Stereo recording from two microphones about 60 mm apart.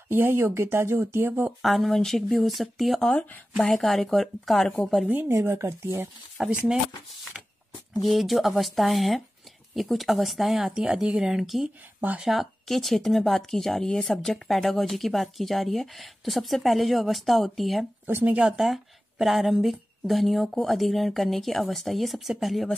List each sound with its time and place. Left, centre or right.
0.1 s speech: right
1.6 s speech: centre
3.2 s speech: left
3.6 s speech: centre
5.3 s speech: right
6.3 s speech: centre
7.3 s a sound: centre
8.1 s speech: centre
12.0 s speech: right
12.3 s speech: centre
18.0 s speech: right
18.6 s speech: centre